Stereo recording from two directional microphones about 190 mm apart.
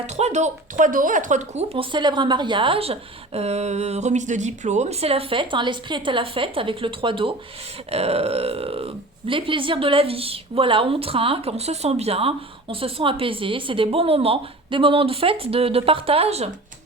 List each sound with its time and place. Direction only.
0.2 s speech: 35° right (ahead or behind)